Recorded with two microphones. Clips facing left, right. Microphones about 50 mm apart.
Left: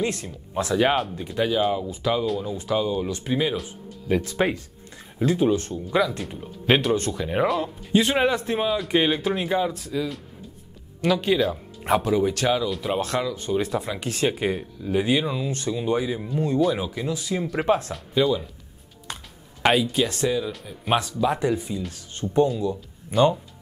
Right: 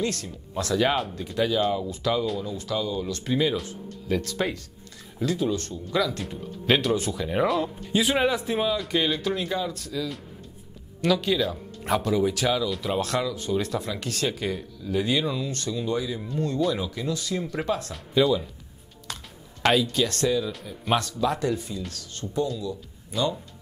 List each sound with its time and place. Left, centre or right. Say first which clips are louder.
0.0 s speech: left 2 dB; left
7.4 s speech: left 1 dB; centre
8.9 s speech: left 3 dB; left
11.0 s speech: left 2 dB; centre
17.6 s speech: left 10 dB; left
17.9 s speech: even; centre
19.6 s speech: left 2 dB; centre
22.2 s speech: left 7 dB; left